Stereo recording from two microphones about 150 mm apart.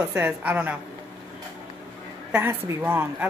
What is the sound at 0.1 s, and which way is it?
Speech, 10° right (ahead or behind).